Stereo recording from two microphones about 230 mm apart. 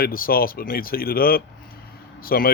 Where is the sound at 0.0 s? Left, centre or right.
Left.